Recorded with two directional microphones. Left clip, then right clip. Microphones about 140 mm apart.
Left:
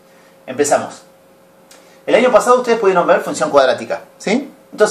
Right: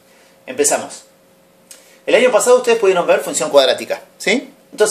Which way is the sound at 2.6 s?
55° right (ahead or behind).